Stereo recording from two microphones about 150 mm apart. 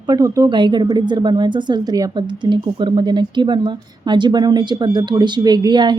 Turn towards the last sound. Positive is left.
turn(degrees=-30)  # may be behind; listen again after turning